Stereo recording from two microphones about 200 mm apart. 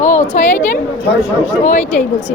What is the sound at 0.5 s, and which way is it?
Speech, 10° left (ahead or behind).